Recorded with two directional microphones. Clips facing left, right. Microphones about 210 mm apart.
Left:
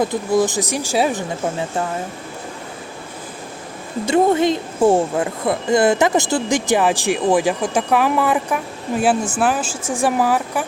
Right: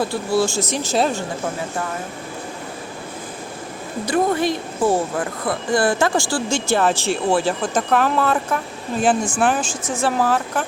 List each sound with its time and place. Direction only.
0.0 s speech: 20° left (ahead or behind)
4.0 s speech: 25° left (ahead or behind)